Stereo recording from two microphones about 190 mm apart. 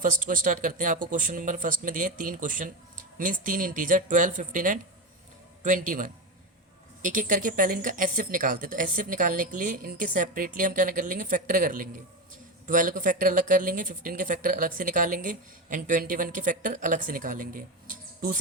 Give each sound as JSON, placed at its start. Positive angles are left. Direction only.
{"t": 0.0, "sound": "speech", "side_deg": -45}